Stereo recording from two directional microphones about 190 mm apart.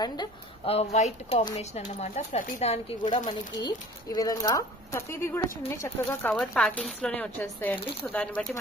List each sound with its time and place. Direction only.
0.0 s speech: 20° left (ahead or behind)
0.7 s speech: 35° left (ahead or behind); by 8.5 s 5° left (ahead or behind)